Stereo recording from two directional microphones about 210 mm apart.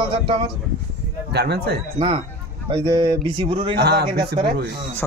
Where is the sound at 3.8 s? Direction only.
50° right (ahead or behind).